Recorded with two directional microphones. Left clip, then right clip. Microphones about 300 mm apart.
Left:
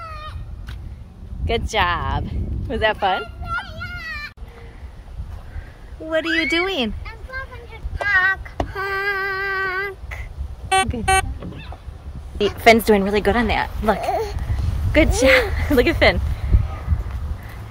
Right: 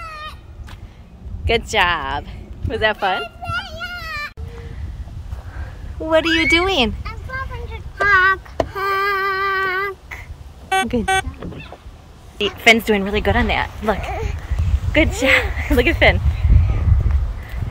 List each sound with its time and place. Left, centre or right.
0.0 s vehicle: right
1.4 s speech: centre
3.4 s children playing: right
6.0 s speech: centre
8.5 s a sound: centre
10.7 s music: centre
12.4 s speech: centre